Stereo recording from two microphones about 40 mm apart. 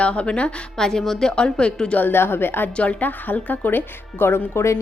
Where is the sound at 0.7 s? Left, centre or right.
Centre.